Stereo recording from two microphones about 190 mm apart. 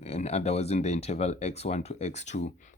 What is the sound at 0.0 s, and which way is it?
Speech, 35° left (ahead or behind).